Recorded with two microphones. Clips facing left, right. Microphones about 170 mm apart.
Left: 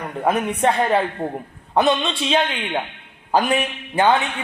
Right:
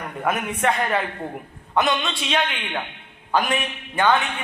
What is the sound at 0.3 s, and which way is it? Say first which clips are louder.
A man's voice: left 4 dB; 30° left (ahead or behind).